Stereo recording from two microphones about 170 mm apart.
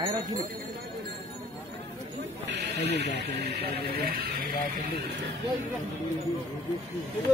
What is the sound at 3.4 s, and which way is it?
Speech, 75° right (ahead or behind).